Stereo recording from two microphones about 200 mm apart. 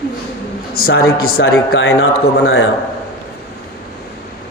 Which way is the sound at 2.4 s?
90° left.